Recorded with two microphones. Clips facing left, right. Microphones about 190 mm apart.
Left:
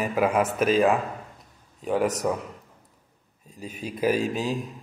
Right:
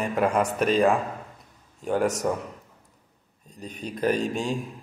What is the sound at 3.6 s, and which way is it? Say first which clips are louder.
A man's voice: left 1 dB; 5° left (ahead or behind).